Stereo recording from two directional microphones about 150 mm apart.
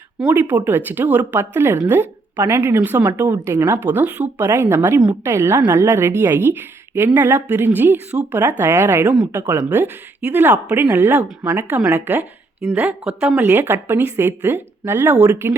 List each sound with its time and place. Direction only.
0.2 s a woman's voice: 10° right (ahead or behind)